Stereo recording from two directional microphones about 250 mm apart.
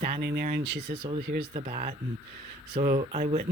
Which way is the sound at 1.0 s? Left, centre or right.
Right.